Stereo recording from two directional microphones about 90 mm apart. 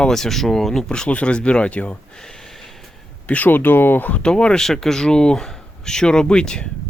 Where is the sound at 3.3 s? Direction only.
20° left (ahead or behind).